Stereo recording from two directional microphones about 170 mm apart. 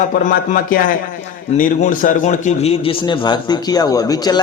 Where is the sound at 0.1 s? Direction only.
55° left (ahead or behind).